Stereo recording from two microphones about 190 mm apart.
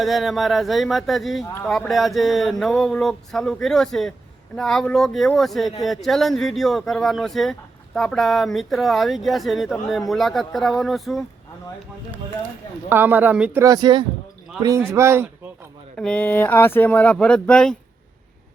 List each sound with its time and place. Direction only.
0.0 s speech: centre (ahead or behind)
12.9 s speech: 10° right (ahead or behind)
13.6 s speech: 20° right (ahead or behind)
16.0 s speech: 5° left (ahead or behind)